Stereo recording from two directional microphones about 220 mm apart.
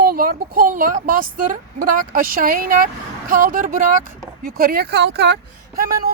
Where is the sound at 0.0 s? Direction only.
45° right (ahead or behind).